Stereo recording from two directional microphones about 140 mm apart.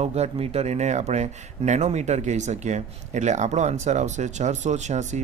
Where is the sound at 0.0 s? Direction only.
50° right (ahead or behind).